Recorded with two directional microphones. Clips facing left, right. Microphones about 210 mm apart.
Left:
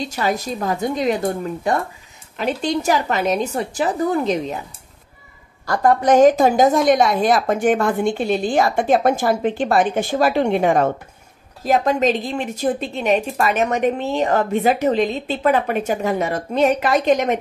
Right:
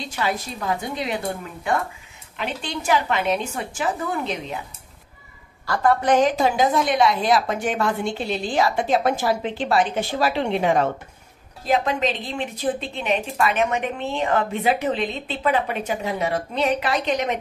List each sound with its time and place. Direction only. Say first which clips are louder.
0.0 s a woman's voice: left 4 dB; 40° left (ahead or behind)
5.9 s a woman's voice: left 6 dB; 45° left (ahead or behind)